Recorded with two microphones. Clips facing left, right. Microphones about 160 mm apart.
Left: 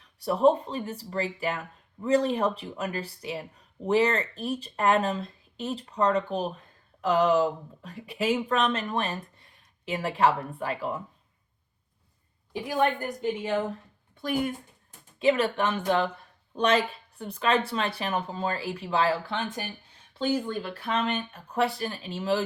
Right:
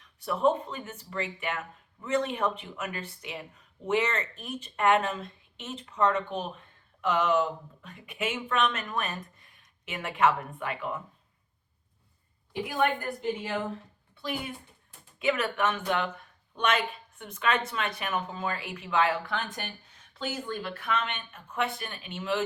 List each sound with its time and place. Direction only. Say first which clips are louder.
0.0 s speech: left 4 dB; 35° left (ahead or behind)
14.2 s speech: left 7 dB; 45° left (ahead or behind)
15.2 s speech: left 4 dB; 30° left (ahead or behind)